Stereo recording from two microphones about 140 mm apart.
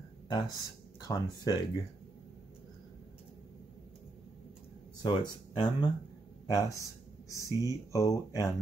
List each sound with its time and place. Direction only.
0.3 s speech: 30° left (ahead or behind)
5.0 s speech: 30° left (ahead or behind)
7.4 s speech: 25° right (ahead or behind)
7.9 s speech: 25° left (ahead or behind)